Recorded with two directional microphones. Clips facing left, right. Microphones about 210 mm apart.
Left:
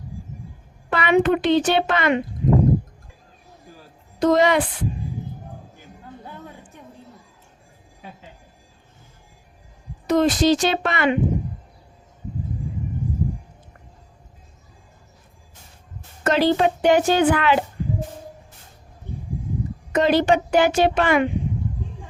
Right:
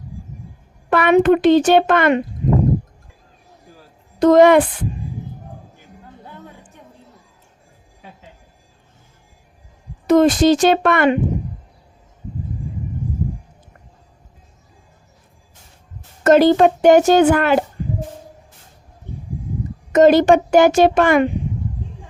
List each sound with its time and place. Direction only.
0.9 s a woman's voice: 50° right (ahead or behind)
4.2 s a woman's voice: 50° right (ahead or behind)
10.1 s a woman's voice: 50° right (ahead or behind)
16.2 s a woman's voice: 45° right (ahead or behind)
19.9 s a woman's voice: 45° right (ahead or behind)